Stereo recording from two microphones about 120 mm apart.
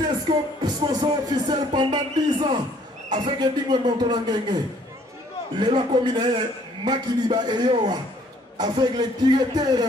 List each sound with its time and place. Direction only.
0.3 s a man's voice: 40° right (ahead or behind)
5.7 s a man's voice: 40° right (ahead or behind)